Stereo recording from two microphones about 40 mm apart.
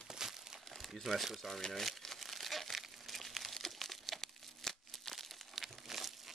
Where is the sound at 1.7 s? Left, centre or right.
Centre.